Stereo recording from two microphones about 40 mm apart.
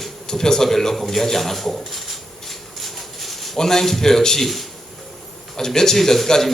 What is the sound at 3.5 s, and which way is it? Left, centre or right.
A man's voice, centre.